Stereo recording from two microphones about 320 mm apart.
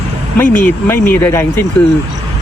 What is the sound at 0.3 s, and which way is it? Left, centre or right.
Speech, centre.